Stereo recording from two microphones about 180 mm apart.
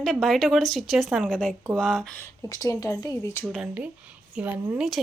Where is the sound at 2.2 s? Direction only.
20° left (ahead or behind).